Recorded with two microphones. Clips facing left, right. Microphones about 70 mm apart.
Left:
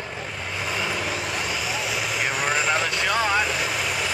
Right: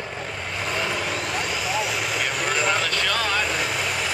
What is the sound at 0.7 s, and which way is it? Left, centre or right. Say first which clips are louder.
Vehicle: right 1 dB; centre.